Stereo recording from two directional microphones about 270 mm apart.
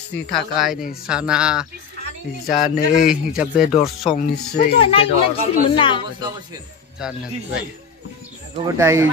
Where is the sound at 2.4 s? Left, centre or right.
Left.